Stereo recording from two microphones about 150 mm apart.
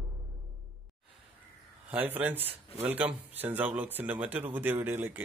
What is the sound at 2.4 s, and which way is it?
Speech, 40° right (ahead or behind).